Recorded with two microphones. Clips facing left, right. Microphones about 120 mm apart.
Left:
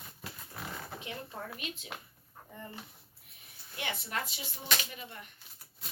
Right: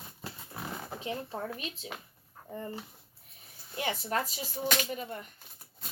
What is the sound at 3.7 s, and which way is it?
A woman's voice, 35° right (ahead or behind).